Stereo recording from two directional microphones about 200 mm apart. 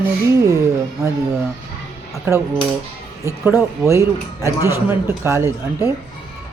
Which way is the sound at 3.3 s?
15° right (ahead or behind).